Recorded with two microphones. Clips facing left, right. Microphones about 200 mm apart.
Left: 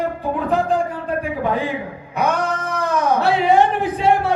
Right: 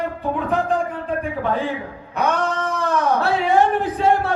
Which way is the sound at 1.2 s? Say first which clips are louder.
Left 2 dB; 10° left (ahead or behind).